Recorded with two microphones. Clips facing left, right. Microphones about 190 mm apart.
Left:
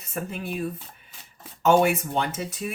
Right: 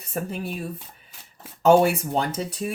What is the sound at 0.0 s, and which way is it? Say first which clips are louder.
Speech: right 3 dB; 35° right (ahead or behind).